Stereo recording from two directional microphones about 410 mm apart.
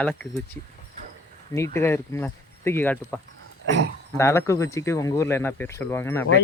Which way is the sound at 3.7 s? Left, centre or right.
Right.